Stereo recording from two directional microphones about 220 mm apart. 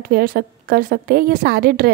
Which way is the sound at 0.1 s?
45° right (ahead or behind).